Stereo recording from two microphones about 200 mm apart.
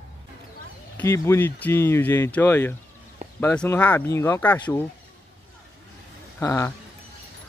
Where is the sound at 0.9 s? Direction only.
15° left (ahead or behind).